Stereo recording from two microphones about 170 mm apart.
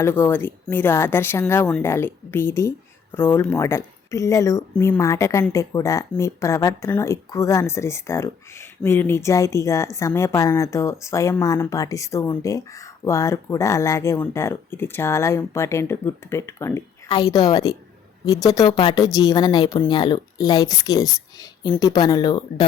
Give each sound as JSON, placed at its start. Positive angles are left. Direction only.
{"t": 0.0, "sound": "a woman's voice", "side_deg": 15}